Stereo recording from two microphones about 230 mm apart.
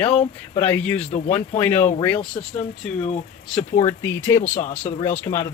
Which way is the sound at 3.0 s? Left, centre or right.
Left.